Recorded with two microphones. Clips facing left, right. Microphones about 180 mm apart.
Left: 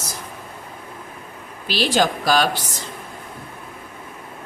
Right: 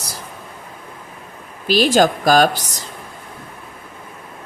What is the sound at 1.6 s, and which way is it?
Speech, 45° right (ahead or behind).